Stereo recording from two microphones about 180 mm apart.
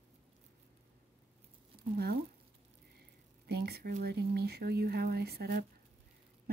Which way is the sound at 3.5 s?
60° right (ahead or behind).